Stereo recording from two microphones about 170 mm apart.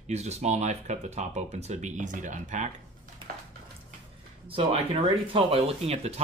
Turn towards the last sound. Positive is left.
turn(degrees=-40)  # may be behind; listen again after turning